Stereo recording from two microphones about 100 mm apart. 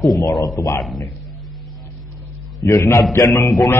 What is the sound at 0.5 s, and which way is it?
Speech, 35° left (ahead or behind).